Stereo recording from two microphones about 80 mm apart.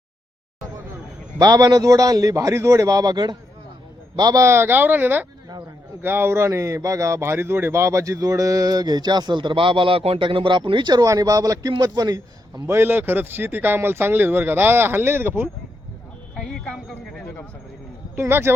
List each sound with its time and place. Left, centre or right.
1.4 s speech: right
4.4 s speech: right
11.0 s speech: right
12.6 s speech: right
16.3 s speech: centre
18.2 s speech: right